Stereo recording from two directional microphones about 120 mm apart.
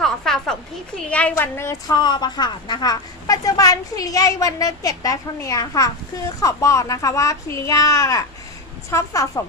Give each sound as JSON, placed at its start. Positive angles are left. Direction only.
{"t": 0.0, "sound": "a sound", "side_deg": 5}
{"t": 1.1, "sound": "a woman's voice", "side_deg": 10}
{"t": 1.9, "sound": "a woman's voice", "side_deg": 35}